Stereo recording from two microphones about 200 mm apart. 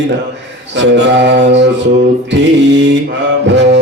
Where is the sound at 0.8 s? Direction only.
60° right (ahead or behind).